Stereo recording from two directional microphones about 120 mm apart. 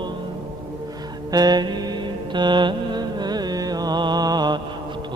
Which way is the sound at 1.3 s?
35° right (ahead or behind).